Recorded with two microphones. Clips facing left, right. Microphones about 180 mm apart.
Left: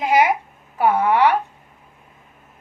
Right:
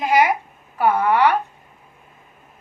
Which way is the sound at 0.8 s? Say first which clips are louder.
Left 1 dB; 25° left (ahead or behind).